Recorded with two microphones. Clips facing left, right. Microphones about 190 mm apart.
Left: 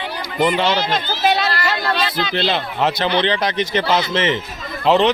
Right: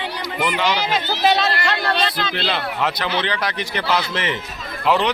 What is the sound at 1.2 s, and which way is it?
Speech, centre (ahead or behind).